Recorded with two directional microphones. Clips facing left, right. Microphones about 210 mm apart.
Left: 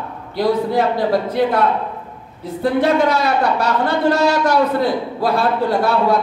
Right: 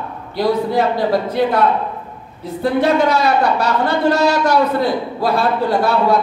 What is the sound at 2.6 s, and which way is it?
A man's voice, 50° left (ahead or behind).